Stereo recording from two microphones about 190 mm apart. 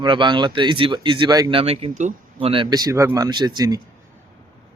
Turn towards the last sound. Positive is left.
turn(degrees=-20)  # may be behind; listen again after turning